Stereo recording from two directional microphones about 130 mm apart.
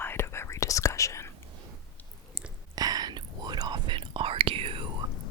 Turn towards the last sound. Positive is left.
turn(degrees=-45)  # may be behind; listen again after turning